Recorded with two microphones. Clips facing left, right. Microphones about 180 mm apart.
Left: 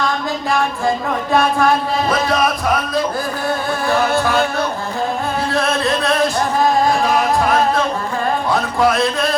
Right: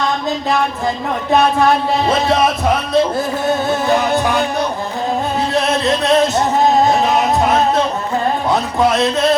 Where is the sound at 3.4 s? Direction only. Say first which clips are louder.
Right 3 dB; 20° right (ahead or behind).